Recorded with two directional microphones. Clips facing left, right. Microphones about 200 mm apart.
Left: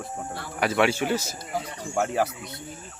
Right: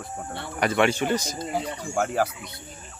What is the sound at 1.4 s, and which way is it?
Speech, 30° right (ahead or behind).